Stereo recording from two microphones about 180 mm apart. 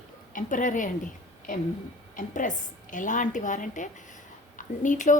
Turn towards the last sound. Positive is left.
turn(degrees=45)  # may be behind; listen again after turning